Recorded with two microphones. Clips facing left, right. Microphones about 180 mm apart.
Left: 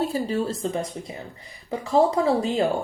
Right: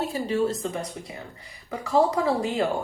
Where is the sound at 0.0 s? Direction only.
35° left (ahead or behind).